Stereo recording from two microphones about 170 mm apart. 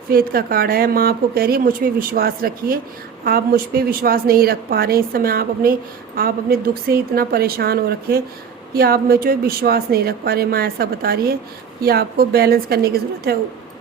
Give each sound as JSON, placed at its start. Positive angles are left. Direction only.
{"t": 0.1, "sound": "a woman's voice", "side_deg": -60}